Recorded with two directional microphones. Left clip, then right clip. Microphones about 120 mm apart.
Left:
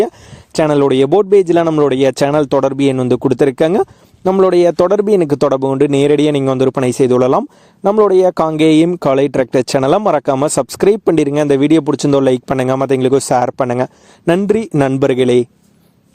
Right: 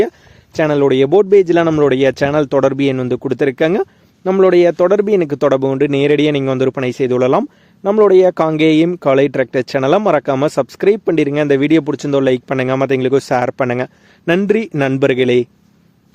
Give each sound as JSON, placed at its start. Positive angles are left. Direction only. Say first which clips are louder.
{"t": 0.6, "sound": "a man's voice", "louder": "left 1 dB", "side_deg": 90}
{"t": 3.0, "sound": "speech", "louder": "left 4 dB", "side_deg": 65}
{"t": 6.4, "sound": "speech", "louder": "left 2 dB", "side_deg": 50}
{"t": 8.9, "sound": "speech", "louder": "even", "side_deg": 70}
{"t": 14.7, "sound": "a man's voice", "louder": "left 3 dB", "side_deg": 35}
{"t": 14.9, "sound": "speech", "louder": "even", "side_deg": 55}